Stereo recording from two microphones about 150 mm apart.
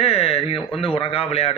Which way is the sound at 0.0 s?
40° left (ahead or behind).